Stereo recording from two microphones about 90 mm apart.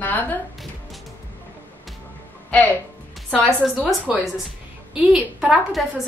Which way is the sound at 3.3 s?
15° left (ahead or behind).